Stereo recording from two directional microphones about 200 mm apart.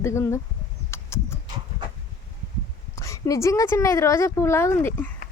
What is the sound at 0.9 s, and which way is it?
Horse, 15° left (ahead or behind).